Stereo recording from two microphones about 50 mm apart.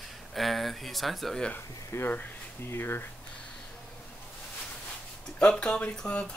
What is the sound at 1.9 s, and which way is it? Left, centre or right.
Speech, left.